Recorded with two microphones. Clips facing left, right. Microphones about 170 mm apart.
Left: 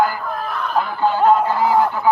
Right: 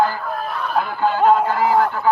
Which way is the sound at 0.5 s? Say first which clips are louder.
Left 1 dB; 10° right (ahead or behind).